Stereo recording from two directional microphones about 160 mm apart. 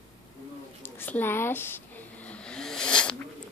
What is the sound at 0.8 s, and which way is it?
Vehicle, 10° left (ahead or behind).